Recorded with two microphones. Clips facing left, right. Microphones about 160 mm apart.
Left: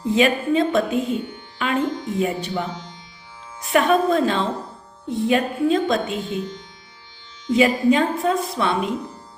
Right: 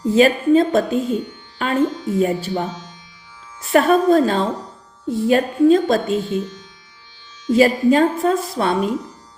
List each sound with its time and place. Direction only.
0.0 s a woman's voice: 40° right (ahead or behind)
3.7 s a woman's voice: 40° right (ahead or behind)
7.5 s a woman's voice: 45° right (ahead or behind)